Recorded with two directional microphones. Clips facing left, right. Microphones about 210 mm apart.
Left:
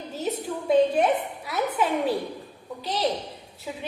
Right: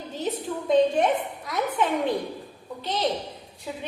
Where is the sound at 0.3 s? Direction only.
10° left (ahead or behind).